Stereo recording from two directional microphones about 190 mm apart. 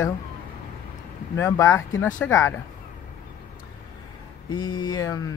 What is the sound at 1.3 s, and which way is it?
Speech, 15° left (ahead or behind).